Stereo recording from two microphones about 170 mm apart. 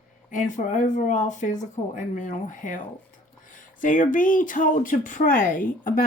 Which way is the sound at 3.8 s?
50° left (ahead or behind).